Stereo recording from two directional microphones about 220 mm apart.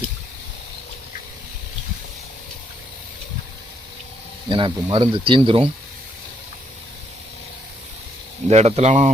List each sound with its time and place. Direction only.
4.4 s speech: 20° right (ahead or behind)
8.4 s speech: 30° right (ahead or behind)